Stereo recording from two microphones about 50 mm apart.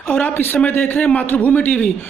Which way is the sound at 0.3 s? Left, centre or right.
Left.